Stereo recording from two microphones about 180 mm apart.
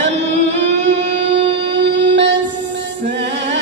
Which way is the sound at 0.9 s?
85° right.